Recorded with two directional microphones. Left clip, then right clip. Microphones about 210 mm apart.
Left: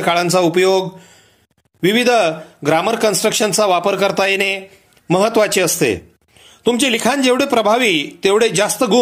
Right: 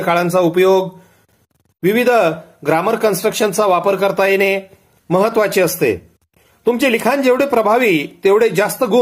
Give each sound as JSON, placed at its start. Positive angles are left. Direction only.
{"t": 0.0, "sound": "speech", "side_deg": 35}